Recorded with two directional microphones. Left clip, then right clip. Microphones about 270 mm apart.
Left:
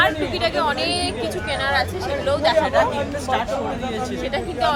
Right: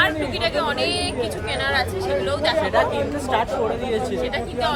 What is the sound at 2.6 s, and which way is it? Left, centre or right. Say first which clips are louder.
Speech: right 1 dB; centre.